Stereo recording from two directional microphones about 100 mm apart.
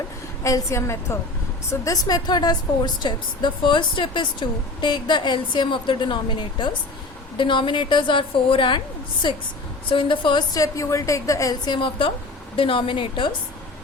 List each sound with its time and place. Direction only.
0.4 s a woman's voice: 30° left (ahead or behind); by 6.1 s 55° left (ahead or behind)
7.3 s a woman's voice: 55° left (ahead or behind)
9.9 s a woman's voice: 55° left (ahead or behind)
10.5 s a woman's voice: 35° left (ahead or behind); by 13.3 s 55° left (ahead or behind)